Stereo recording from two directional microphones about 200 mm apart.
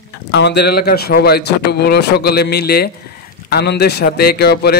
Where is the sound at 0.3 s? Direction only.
60° left (ahead or behind).